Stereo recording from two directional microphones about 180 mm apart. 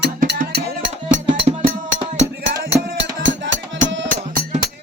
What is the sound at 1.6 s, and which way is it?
Music, 50° right (ahead or behind).